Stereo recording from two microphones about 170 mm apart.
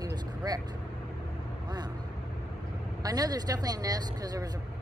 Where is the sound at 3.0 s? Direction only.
20° right (ahead or behind).